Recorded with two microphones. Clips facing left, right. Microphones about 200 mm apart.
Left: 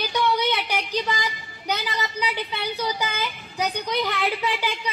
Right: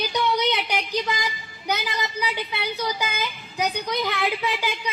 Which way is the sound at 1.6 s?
10° right (ahead or behind).